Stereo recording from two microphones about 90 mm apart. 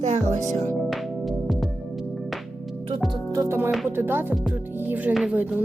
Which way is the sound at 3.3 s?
30° right (ahead or behind).